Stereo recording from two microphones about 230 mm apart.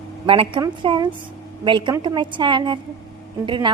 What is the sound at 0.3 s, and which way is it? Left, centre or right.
A woman's voice, right.